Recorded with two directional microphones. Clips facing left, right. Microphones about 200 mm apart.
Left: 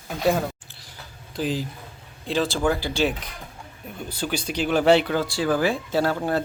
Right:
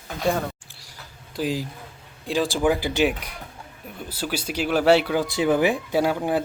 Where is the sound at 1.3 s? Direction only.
5° right (ahead or behind).